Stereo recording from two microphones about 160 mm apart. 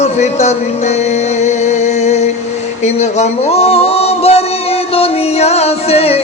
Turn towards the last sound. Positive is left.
turn(degrees=40)  # may be behind; listen again after turning